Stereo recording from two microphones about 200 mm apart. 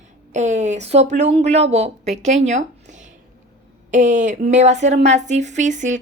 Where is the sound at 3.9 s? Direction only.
40° right (ahead or behind).